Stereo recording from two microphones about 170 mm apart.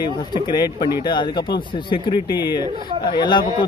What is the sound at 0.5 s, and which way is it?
Speech, 25° left (ahead or behind).